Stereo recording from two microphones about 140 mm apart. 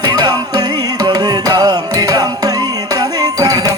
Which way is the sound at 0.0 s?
30° right (ahead or behind).